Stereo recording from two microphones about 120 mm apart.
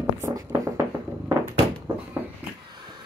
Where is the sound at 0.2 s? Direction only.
30° right (ahead or behind).